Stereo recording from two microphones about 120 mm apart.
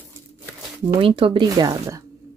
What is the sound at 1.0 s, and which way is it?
Speech, 50° right (ahead or behind).